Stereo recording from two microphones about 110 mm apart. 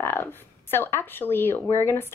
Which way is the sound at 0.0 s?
20° left (ahead or behind).